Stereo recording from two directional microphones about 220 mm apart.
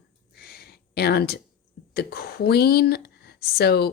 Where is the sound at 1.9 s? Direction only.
45° left (ahead or behind).